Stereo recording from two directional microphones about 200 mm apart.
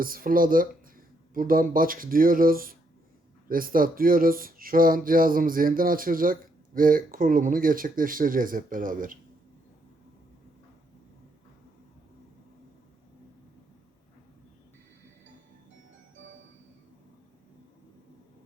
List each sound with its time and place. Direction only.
0.0 s speech: 45° right (ahead or behind)